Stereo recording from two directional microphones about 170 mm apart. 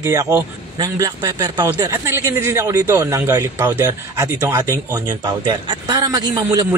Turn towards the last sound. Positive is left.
turn(degrees=-20)  # may be behind; listen again after turning